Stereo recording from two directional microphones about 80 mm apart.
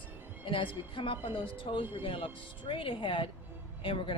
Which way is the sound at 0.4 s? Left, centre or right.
Left.